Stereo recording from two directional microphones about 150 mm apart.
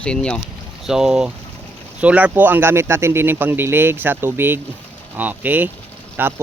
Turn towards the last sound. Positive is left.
turn(degrees=-15)  # may be behind; listen again after turning